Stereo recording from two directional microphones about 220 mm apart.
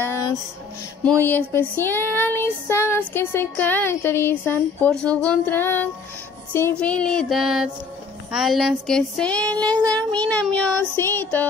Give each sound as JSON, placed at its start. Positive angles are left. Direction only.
{"t": 0.0, "sound": "a sound", "side_deg": 10}
{"t": 1.0, "sound": "child singing", "side_deg": 10}
{"t": 6.5, "sound": "speech", "side_deg": 10}
{"t": 10.2, "sound": "child singing", "side_deg": 5}